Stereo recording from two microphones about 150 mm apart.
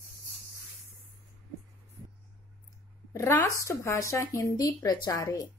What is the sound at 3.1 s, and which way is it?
A woman's voice, 20° left (ahead or behind).